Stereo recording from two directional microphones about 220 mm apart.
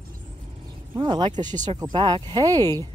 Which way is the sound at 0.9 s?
20° right (ahead or behind).